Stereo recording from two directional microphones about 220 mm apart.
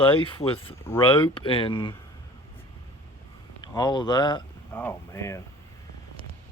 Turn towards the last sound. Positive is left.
turn(degrees=15)  # may be behind; listen again after turning